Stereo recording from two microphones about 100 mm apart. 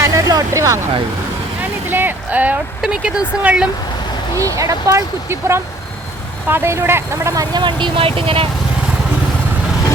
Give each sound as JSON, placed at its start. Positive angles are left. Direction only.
{"t": 0.0, "sound": "vehicle", "side_deg": -35}
{"t": 1.9, "sound": "speech", "side_deg": -20}
{"t": 4.4, "sound": "speech", "side_deg": -35}
{"t": 7.3, "sound": "speech", "side_deg": -50}